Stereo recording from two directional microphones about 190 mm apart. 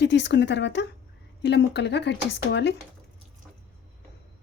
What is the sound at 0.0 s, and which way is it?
Speech, 70° left (ahead or behind).